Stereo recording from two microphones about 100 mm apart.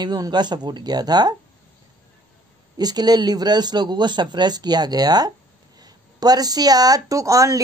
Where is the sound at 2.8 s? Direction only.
40° right (ahead or behind).